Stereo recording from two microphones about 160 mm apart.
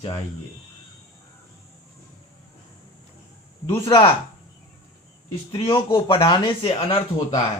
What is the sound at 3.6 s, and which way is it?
Speech, 30° left (ahead or behind).